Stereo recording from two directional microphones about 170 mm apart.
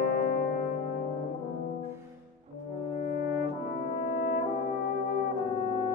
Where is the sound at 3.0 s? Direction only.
50° left (ahead or behind).